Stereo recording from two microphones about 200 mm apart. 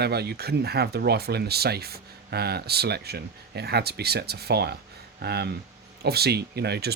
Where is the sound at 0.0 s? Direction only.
55° right (ahead or behind).